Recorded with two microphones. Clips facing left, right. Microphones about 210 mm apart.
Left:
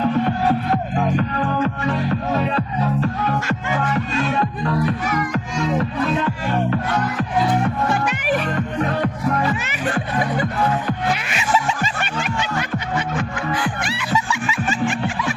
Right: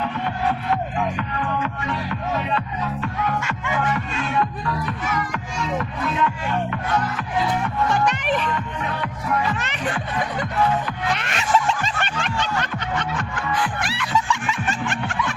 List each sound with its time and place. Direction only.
0.0 s music: 40° left (ahead or behind)
7.9 s music: 5° left (ahead or behind)
8.4 s music: 45° left (ahead or behind)
11.1 s music: 5° left (ahead or behind)